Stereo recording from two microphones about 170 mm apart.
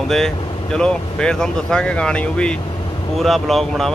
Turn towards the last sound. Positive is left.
turn(degrees=0)  # may be behind; listen again after turning